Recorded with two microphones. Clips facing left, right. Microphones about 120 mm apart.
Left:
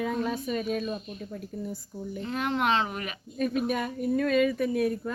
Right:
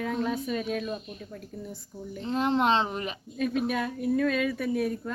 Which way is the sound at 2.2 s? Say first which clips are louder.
Right 3 dB; 30° right (ahead or behind).